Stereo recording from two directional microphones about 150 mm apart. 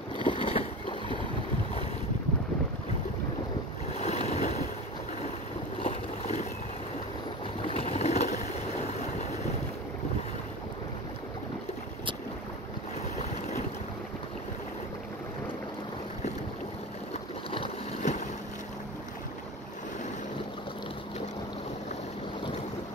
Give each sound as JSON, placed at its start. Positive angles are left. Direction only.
{"t": 0.2, "sound": "boat", "side_deg": 35}
{"t": 3.9, "sound": "boat", "side_deg": 45}
{"t": 5.8, "sound": "boat", "side_deg": 45}
{"t": 7.6, "sound": "a sound", "side_deg": 40}
{"t": 8.8, "sound": "boat", "side_deg": 45}
{"t": 17.1, "sound": "boat", "side_deg": 35}
{"t": 18.0, "sound": "boat", "side_deg": 55}